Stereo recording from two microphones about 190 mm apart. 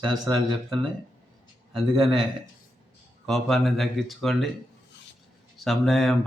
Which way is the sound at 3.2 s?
Centre (ahead or behind).